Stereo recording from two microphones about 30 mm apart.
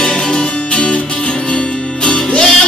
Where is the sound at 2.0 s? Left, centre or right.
Left.